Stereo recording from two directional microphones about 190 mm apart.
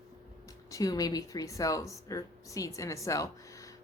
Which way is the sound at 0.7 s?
20° left (ahead or behind).